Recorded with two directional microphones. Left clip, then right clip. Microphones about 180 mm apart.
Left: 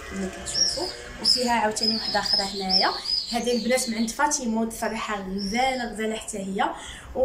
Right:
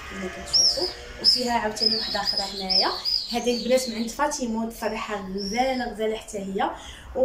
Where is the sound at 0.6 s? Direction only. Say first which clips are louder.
Right 2 dB; 15° left (ahead or behind).